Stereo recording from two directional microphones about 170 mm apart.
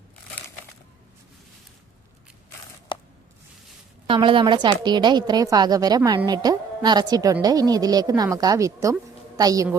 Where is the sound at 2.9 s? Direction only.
25° left (ahead or behind).